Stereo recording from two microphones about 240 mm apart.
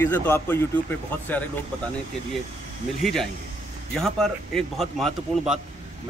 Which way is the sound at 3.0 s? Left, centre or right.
Centre.